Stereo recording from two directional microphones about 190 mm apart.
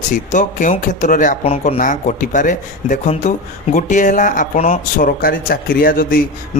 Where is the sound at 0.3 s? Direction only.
40° left (ahead or behind).